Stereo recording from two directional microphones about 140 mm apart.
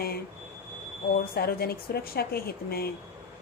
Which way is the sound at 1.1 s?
90° left.